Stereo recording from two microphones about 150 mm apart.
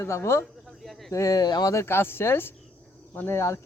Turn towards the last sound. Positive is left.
turn(degrees=20)  # may be behind; listen again after turning